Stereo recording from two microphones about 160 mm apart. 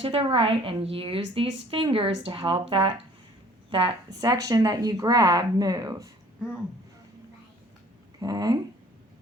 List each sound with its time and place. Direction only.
0.0 s a woman's voice: 35° right (ahead or behind)
8.2 s speech: 25° right (ahead or behind)